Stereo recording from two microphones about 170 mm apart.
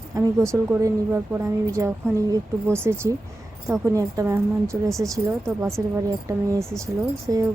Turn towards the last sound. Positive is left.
turn(degrees=-15)  # may be behind; listen again after turning